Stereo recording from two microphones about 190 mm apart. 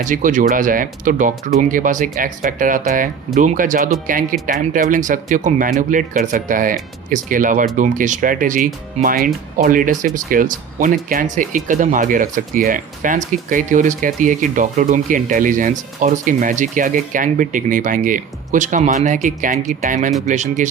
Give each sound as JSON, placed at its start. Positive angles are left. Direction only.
{"t": 0.0, "sound": "speech", "side_deg": -45}